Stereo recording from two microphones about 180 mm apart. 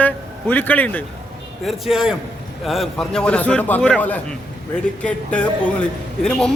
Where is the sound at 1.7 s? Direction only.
Centre (ahead or behind).